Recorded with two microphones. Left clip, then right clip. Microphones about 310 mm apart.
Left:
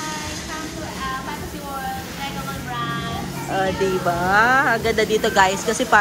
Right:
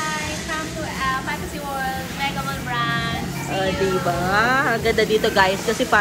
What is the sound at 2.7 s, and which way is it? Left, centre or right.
Speech, centre.